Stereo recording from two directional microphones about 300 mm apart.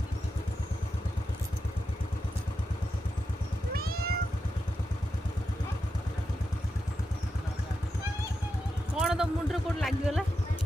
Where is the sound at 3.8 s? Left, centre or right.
Right.